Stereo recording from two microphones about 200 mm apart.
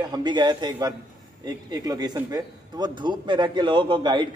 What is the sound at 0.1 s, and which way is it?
A man's voice, 20° right (ahead or behind).